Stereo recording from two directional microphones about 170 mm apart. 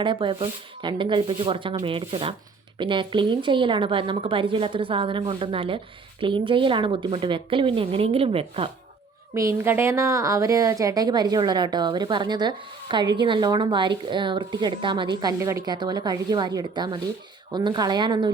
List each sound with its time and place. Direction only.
0.0 s a woman's voice: 30° right (ahead or behind)
9.3 s a woman's voice: 15° right (ahead or behind)